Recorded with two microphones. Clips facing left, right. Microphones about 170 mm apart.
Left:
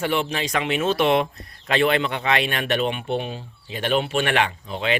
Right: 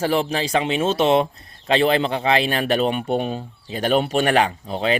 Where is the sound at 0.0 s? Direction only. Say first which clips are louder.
Right 3 dB; 35° right (ahead or behind).